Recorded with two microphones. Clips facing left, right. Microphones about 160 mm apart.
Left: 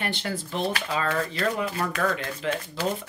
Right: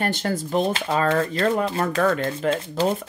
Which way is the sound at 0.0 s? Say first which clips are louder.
Right 6 dB; 45° right (ahead or behind).